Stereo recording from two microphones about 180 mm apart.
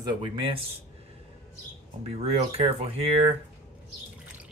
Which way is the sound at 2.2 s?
35° right (ahead or behind).